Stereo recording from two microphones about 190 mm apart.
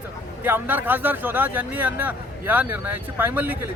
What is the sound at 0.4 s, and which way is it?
Speech, 10° right (ahead or behind).